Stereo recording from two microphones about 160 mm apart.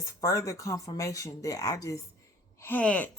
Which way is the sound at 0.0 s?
20° left (ahead or behind).